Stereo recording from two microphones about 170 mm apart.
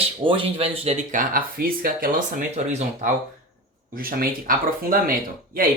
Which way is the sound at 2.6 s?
40° right (ahead or behind).